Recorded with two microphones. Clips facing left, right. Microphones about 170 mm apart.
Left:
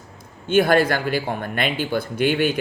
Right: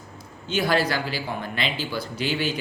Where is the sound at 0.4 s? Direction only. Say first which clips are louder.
Left 7 dB; 55° left (ahead or behind).